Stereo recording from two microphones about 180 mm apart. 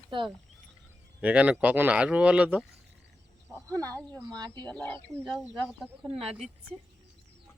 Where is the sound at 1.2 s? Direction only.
5° right (ahead or behind).